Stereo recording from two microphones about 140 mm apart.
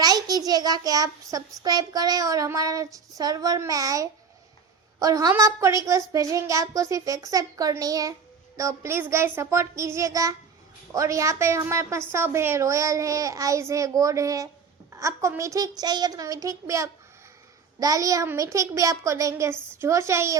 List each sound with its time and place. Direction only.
0.0 s a child's voice: 30° right (ahead or behind)